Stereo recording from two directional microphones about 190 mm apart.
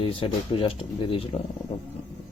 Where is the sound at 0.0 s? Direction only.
30° left (ahead or behind).